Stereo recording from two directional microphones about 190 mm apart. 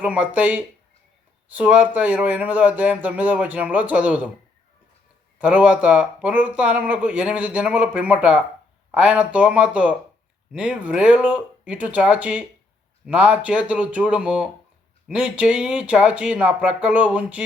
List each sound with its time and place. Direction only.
0.0 s speech: 5° right (ahead or behind)
5.4 s speech: 5° right (ahead or behind)